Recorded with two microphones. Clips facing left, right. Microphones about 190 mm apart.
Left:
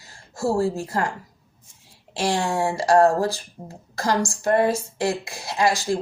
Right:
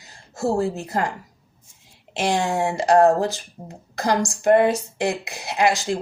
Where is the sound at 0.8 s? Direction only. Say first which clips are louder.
Right 1 dB; 20° right (ahead or behind).